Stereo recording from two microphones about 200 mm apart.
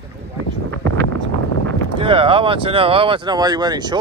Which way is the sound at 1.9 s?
25° right (ahead or behind).